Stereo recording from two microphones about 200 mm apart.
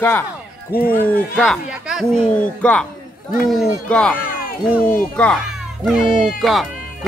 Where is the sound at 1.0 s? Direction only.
5° left (ahead or behind).